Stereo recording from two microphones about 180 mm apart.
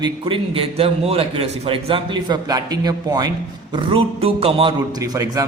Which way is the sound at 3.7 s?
30° right (ahead or behind).